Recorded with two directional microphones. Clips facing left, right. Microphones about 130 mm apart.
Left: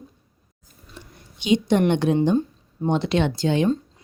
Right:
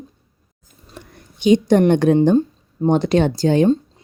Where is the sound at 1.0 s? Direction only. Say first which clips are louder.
Right 4 dB; 45° right (ahead or behind).